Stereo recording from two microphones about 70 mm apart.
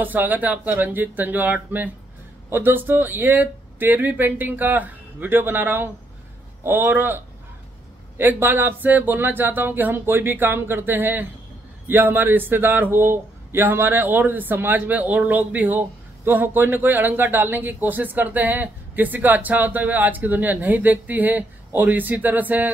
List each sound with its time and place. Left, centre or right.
0.0 s speech: right